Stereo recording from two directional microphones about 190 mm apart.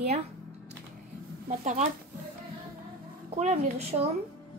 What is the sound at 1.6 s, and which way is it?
Speech, 40° right (ahead or behind).